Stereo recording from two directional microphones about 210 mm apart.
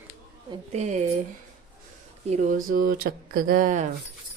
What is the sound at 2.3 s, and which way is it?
Speech, 35° right (ahead or behind).